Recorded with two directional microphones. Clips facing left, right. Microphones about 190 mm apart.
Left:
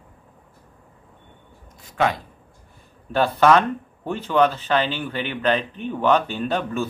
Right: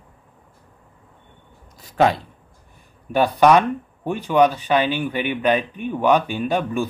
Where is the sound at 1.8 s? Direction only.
35° right (ahead or behind).